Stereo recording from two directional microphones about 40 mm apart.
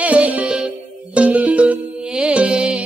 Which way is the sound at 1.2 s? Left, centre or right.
Right.